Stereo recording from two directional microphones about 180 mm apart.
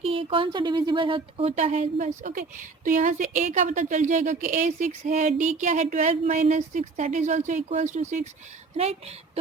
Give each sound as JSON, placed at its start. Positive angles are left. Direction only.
{"t": 0.0, "sound": "a woman's voice", "side_deg": -30}